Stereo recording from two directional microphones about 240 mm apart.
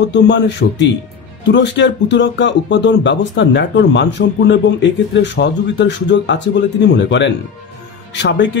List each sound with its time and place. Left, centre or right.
0.1 s speech: left